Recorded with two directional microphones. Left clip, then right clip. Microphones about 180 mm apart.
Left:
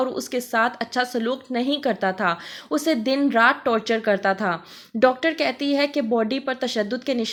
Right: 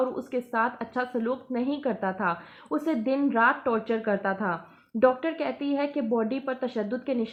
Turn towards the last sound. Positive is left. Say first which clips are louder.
# left 5 dB
turn(degrees=25)  # may be behind; listen again after turning